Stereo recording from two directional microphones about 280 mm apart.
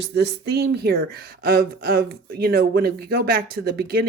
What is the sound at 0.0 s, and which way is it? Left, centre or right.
Speech, right.